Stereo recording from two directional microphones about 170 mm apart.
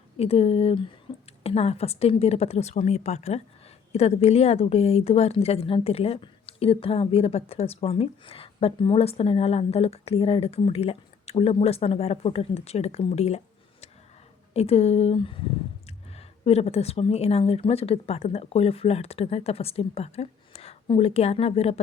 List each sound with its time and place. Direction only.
0.2 s a woman's voice: 35° left (ahead or behind)
1.1 s whispering: 30° left (ahead or behind)
1.5 s a woman's voice: 35° left (ahead or behind)
14.5 s a woman's voice: 35° left (ahead or behind)